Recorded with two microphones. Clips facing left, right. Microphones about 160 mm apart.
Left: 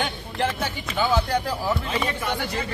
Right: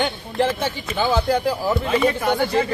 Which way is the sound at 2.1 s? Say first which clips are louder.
Right 8 dB; 40° right (ahead or behind).